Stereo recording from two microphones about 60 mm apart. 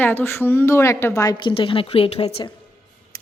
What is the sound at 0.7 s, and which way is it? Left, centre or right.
Speech, left.